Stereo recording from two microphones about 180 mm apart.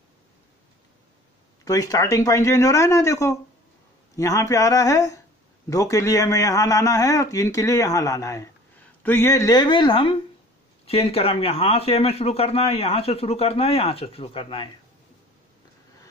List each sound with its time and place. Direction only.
1.6 s a man's voice: 20° left (ahead or behind)